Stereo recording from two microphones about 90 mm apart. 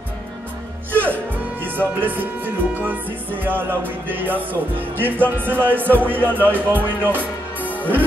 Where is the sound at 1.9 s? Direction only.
20° right (ahead or behind).